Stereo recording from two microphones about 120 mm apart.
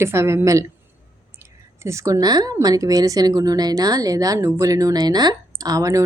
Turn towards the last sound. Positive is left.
turn(degrees=-30)  # may be behind; listen again after turning